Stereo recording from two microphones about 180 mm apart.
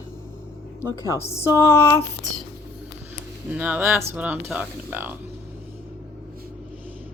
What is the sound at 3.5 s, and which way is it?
Speech, 10° right (ahead or behind).